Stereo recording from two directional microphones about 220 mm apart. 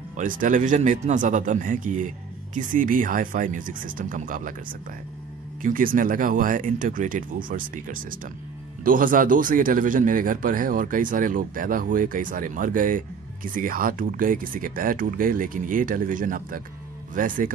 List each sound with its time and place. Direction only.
0.2 s a man's voice: 40° right (ahead or behind)